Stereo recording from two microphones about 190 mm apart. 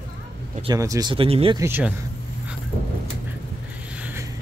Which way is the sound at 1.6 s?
10° right (ahead or behind).